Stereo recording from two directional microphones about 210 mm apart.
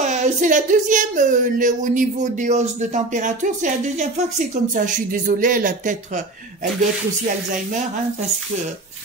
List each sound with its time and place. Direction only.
0.0 s speech: 35° right (ahead or behind)